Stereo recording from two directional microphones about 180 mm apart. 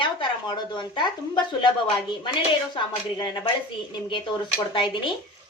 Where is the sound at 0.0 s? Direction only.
25° left (ahead or behind).